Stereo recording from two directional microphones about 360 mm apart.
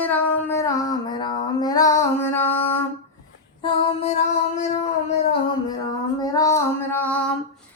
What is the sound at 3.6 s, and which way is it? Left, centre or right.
Female singing, centre.